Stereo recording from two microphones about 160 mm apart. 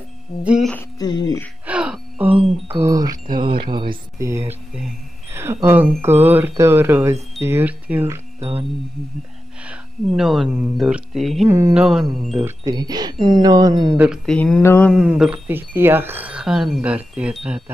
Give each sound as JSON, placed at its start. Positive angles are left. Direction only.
{"t": 0.4, "sound": "speech", "side_deg": -5}
{"t": 0.9, "sound": "speech", "side_deg": 25}
{"t": 1.7, "sound": "gasp", "side_deg": -5}
{"t": 2.7, "sound": "speech", "side_deg": -20}
{"t": 5.3, "sound": "speech", "side_deg": -15}
{"t": 8.4, "sound": "speech", "side_deg": -35}
{"t": 9.7, "sound": "speech", "side_deg": -5}
{"t": 11.4, "sound": "speech", "side_deg": -15}
{"t": 11.7, "sound": "speech", "side_deg": -5}
{"t": 12.4, "sound": "speech", "side_deg": -25}
{"t": 13.9, "sound": "speech", "side_deg": -5}
{"t": 14.6, "sound": "mantra", "side_deg": 15}
{"t": 14.9, "sound": "speech", "side_deg": -5}